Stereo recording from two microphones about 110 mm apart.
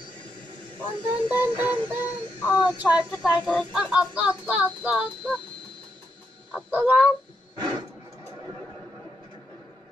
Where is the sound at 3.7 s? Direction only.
10° right (ahead or behind).